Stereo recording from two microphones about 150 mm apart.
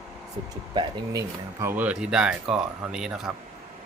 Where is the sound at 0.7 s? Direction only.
30° right (ahead or behind).